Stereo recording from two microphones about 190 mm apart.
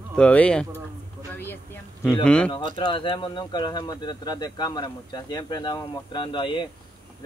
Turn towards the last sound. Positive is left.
turn(degrees=25)  # may be behind; listen again after turning